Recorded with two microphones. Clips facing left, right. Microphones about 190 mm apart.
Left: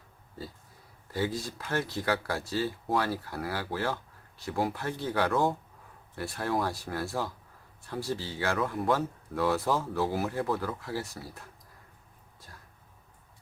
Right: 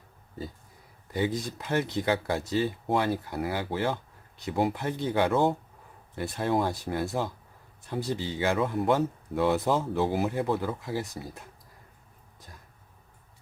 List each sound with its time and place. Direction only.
1.1 s speech: 20° right (ahead or behind)